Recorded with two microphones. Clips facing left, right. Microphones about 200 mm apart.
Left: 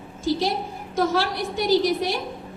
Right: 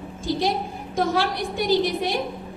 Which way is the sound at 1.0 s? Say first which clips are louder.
Even; 50° right (ahead or behind).